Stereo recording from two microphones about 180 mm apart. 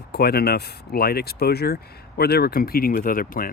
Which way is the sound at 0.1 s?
60° left (ahead or behind).